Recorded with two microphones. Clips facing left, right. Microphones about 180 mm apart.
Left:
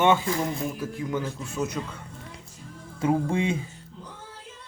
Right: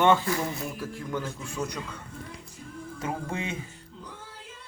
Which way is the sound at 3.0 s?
30° left (ahead or behind).